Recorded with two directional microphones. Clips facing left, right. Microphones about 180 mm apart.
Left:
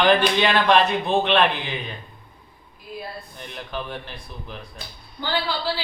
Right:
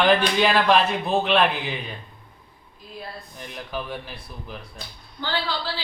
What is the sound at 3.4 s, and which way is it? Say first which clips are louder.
Speech: even; 5° right (ahead or behind).